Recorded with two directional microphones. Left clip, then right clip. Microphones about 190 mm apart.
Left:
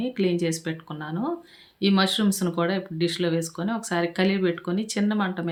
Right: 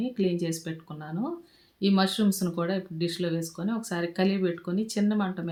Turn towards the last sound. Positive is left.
turn(degrees=10)  # may be behind; listen again after turning